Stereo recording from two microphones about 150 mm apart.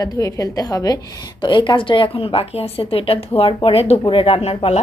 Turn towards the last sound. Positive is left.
turn(degrees=45)  # may be behind; listen again after turning